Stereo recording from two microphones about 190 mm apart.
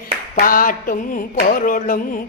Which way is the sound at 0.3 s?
50° left (ahead or behind).